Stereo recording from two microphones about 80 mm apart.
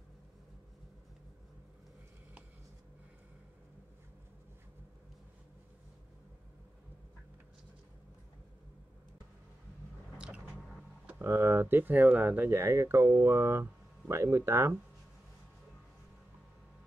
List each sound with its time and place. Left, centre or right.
10.1 s squish: centre
11.2 s speech: right
12.4 s speech: right